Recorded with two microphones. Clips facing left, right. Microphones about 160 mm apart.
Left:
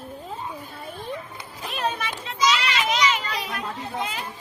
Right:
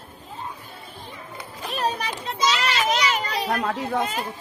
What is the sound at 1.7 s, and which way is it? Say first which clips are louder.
Children playing: right 2 dB; 35° right (ahead or behind).